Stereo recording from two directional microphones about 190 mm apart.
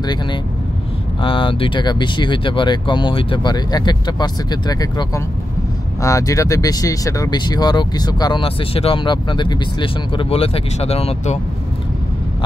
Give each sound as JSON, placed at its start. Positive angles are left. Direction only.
{"t": 0.0, "sound": "speech", "side_deg": 20}